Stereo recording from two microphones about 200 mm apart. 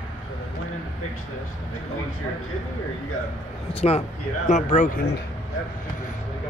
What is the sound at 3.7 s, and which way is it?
Speech, 30° left (ahead or behind).